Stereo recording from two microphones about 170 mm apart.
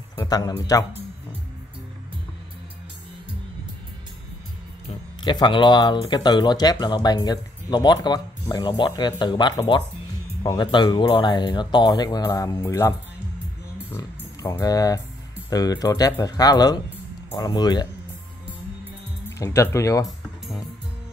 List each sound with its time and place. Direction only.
0.1 s speech: 20° left (ahead or behind)
4.8 s speech: 25° left (ahead or behind)
13.9 s speech: 20° left (ahead or behind)
19.3 s speech: 15° left (ahead or behind)